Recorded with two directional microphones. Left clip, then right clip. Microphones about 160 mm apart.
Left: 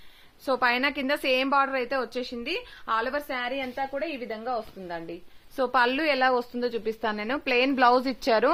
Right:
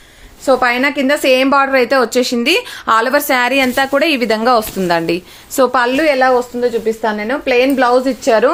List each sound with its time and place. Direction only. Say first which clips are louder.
0.4 s a woman's voice: right 12 dB; 30° left (ahead or behind); by 5.1 s 40° right (ahead or behind)
5.7 s a woman's voice: right 9 dB; 15° left (ahead or behind)
6.0 s a woman's voice: right 12 dB; 35° left (ahead or behind)
6.6 s a woman's voice: right 13 dB; 50° left (ahead or behind)